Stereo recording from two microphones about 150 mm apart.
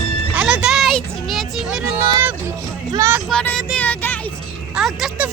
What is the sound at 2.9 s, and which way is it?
Vehicle, 20° right (ahead or behind).